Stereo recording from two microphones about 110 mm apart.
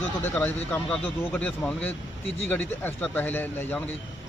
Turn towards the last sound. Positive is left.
turn(degrees=15)  # may be behind; listen again after turning